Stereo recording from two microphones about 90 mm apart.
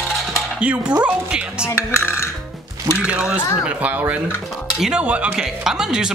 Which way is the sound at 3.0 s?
15° right (ahead or behind).